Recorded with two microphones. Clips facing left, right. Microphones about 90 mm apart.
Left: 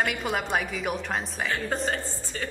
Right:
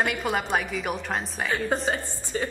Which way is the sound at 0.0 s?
Centre (ahead or behind).